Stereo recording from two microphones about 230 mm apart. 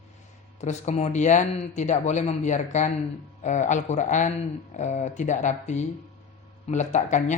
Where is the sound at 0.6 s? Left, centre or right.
Left.